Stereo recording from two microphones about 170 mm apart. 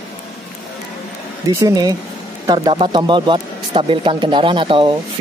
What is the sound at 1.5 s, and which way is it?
Speech, 20° right (ahead or behind).